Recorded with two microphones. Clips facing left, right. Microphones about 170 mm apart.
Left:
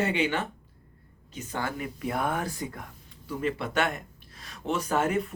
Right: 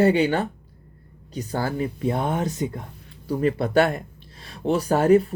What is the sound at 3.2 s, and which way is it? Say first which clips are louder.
Speech: right 8 dB; 40° right (ahead or behind).